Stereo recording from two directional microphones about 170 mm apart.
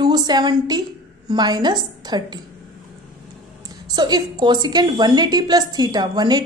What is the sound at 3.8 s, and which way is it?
A woman's voice, 25° right (ahead or behind).